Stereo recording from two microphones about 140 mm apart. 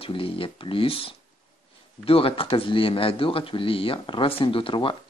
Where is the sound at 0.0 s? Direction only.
40° left (ahead or behind).